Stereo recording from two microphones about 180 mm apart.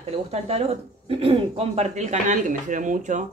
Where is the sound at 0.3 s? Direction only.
35° right (ahead or behind).